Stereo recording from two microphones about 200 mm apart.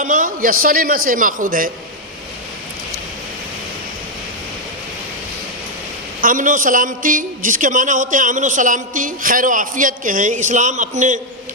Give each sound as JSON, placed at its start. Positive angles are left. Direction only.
{"t": 0.0, "sound": "a man's voice", "side_deg": -40}
{"t": 6.2, "sound": "a man's voice", "side_deg": -40}